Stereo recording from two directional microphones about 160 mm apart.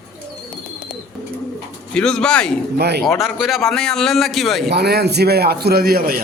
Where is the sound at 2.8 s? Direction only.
90° right.